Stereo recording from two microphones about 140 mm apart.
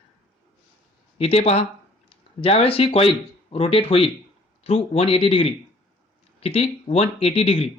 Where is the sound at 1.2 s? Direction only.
45° left (ahead or behind).